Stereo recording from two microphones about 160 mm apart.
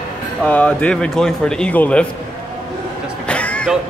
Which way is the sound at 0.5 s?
10° left (ahead or behind).